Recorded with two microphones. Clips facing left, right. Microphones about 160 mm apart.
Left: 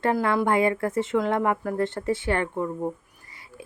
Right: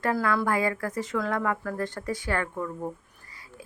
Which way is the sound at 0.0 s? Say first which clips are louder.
Left 3 dB; 25° left (ahead or behind).